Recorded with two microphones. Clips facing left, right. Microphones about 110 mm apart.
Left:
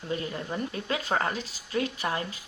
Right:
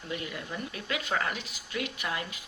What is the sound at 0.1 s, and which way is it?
Speech, 35° left (ahead or behind).